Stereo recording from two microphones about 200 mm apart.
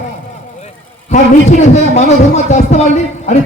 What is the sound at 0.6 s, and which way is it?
A man's voice, 35° left (ahead or behind).